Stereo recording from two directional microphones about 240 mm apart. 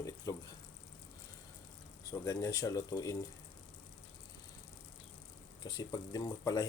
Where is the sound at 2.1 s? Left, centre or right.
Centre.